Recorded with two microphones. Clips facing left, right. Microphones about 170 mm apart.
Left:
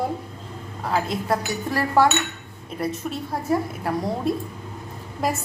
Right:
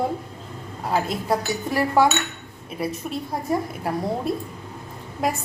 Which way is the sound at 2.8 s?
5° right (ahead or behind).